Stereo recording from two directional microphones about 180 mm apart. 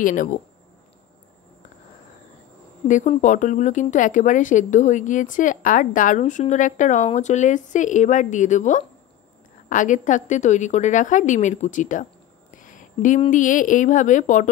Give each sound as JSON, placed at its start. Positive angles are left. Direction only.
{"t": 0.0, "sound": "speech", "side_deg": 45}
{"t": 2.9, "sound": "a woman's voice", "side_deg": 45}